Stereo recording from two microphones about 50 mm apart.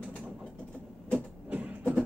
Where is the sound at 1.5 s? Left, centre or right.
Right.